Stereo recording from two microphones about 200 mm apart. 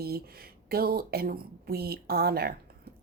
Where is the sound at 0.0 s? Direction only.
50° right (ahead or behind).